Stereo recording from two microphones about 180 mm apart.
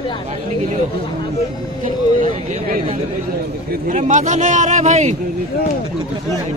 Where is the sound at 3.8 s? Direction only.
40° right (ahead or behind).